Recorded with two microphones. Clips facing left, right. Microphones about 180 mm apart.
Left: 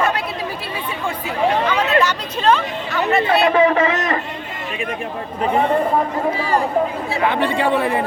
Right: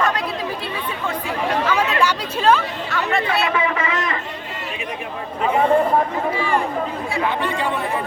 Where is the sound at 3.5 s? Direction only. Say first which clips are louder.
Left 7 dB; 35° left (ahead or behind).